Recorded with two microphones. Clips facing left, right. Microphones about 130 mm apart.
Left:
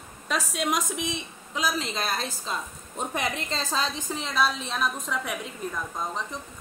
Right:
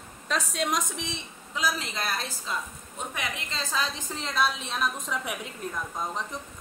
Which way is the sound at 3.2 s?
35° left (ahead or behind).